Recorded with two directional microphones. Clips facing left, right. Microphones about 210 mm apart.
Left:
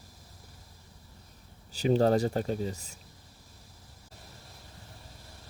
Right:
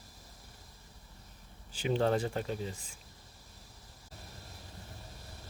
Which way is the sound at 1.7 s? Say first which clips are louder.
Left 5 dB; 40° left (ahead or behind).